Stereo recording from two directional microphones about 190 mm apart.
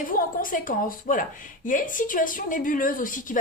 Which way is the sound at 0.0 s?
45° left (ahead or behind).